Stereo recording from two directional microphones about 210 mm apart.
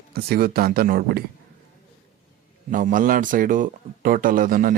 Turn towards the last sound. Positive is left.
turn(degrees=-40)  # may be behind; listen again after turning